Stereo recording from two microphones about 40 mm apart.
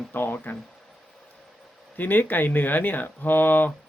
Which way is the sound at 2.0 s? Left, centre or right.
Left.